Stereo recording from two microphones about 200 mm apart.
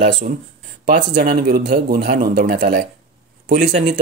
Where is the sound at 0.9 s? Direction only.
45° right (ahead or behind).